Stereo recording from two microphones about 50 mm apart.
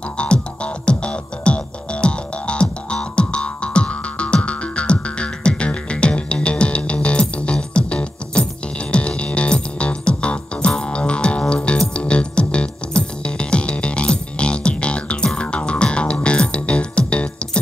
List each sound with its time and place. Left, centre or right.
0.2 s music: left